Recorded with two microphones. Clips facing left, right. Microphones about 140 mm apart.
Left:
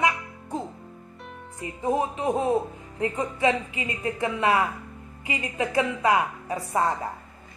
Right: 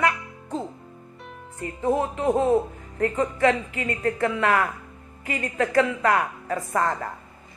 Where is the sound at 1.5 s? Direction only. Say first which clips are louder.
Right 2 dB; 15° left (ahead or behind).